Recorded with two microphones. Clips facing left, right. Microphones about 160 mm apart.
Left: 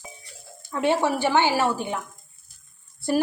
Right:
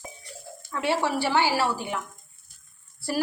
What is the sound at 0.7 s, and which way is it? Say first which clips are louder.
A woman's voice: left 4 dB; 20° left (ahead or behind).